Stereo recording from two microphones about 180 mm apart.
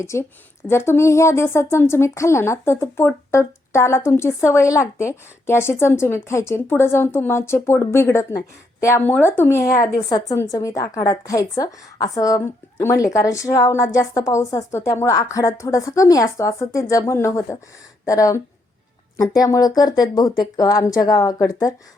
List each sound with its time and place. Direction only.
0.0 s a woman's voice: 15° left (ahead or behind)
9.6 s a woman's voice: 50° left (ahead or behind)
10.1 s a woman's voice: 20° left (ahead or behind)